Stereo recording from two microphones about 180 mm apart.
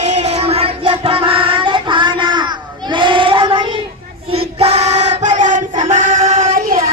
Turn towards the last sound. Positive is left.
turn(degrees=-45)  # may be behind; listen again after turning